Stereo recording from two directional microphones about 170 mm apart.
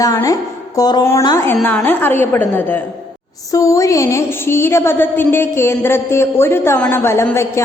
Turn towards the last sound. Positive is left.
turn(degrees=15)  # may be behind; listen again after turning